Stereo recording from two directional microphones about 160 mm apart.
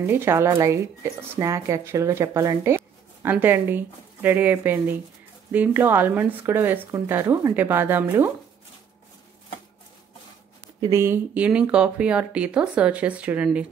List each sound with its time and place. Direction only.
0.0 s speech: 15° right (ahead or behind)
10.9 s speech: 15° right (ahead or behind)